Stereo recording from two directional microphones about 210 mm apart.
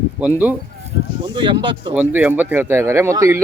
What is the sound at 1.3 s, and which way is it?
Speech, 25° right (ahead or behind).